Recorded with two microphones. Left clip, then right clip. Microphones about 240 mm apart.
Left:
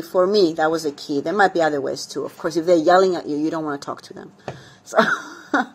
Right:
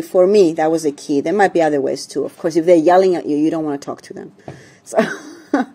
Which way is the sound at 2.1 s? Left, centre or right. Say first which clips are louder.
Right 6 dB; right.